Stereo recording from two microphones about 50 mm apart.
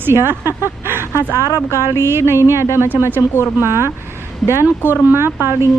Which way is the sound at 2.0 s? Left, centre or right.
Right.